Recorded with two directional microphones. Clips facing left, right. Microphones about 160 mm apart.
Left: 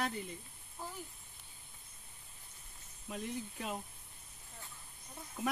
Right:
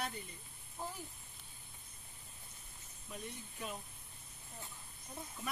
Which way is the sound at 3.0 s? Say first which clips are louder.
Left 7 dB; 90° left.